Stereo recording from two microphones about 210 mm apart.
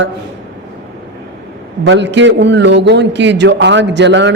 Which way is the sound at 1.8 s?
60° right (ahead or behind).